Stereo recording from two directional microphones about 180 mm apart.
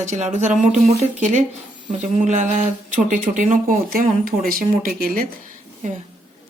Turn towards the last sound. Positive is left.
turn(degrees=-50)  # may be behind; listen again after turning